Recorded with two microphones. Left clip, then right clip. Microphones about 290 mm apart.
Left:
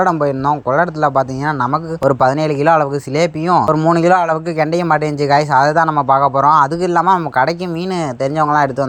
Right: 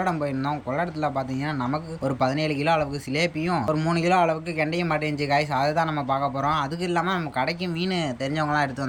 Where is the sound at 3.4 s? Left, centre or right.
Left.